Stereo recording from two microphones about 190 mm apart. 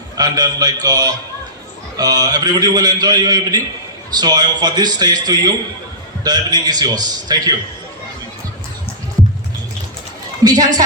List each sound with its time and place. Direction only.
0.2 s a man's voice: 20° right (ahead or behind)
10.4 s a man's voice: 20° right (ahead or behind)